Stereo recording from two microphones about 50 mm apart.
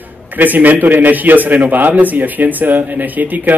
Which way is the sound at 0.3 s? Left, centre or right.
Right.